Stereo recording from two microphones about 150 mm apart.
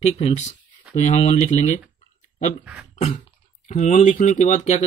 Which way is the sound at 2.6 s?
5° right (ahead or behind).